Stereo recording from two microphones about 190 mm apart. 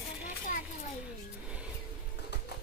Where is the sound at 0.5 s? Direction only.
45° left (ahead or behind).